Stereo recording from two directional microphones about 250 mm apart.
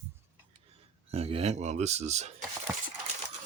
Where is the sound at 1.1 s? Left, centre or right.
Right.